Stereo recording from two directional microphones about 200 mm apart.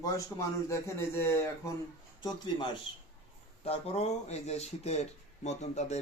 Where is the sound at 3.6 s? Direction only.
30° left (ahead or behind).